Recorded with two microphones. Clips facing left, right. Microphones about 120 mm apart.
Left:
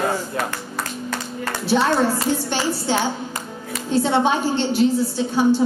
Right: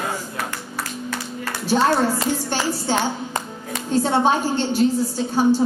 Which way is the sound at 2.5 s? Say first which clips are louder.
Even; 40° right (ahead or behind).